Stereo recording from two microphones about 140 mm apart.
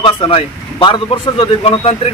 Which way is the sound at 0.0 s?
35° left (ahead or behind).